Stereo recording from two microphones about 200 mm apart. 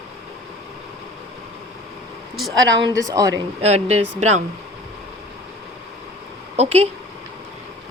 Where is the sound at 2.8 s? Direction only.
20° right (ahead or behind).